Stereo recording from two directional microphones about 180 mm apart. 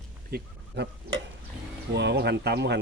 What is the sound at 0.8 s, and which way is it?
Speech, 70° right (ahead or behind).